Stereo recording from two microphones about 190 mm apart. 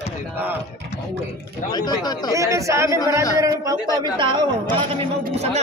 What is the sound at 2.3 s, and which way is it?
Speech, 15° right (ahead or behind).